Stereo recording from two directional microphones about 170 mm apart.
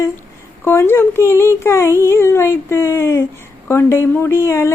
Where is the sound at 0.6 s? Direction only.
15° left (ahead or behind).